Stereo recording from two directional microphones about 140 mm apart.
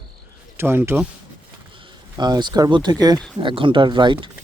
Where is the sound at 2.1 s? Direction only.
30° right (ahead or behind).